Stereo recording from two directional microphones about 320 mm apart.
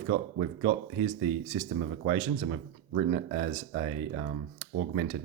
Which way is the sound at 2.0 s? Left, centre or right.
Right.